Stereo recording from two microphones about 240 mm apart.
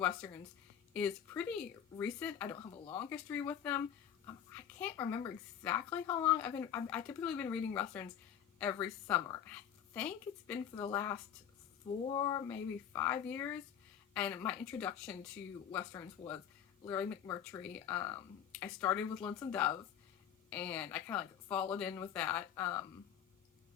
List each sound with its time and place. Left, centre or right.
0.2 s a woman's voice: centre
22.6 s speech: left